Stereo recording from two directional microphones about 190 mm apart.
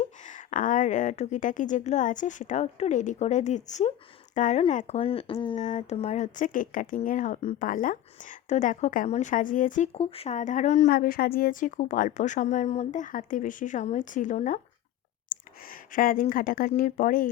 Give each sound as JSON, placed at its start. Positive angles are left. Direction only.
{"t": 0.0, "sound": "speech", "side_deg": 40}